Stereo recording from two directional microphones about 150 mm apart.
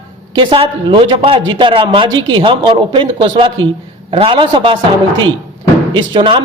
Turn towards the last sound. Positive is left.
turn(degrees=-35)  # may be behind; listen again after turning